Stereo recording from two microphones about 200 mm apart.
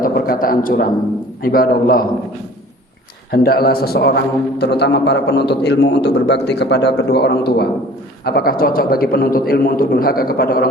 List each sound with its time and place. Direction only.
0.0 s a man's voice: 45° left (ahead or behind)
3.3 s a man's voice: 50° left (ahead or behind)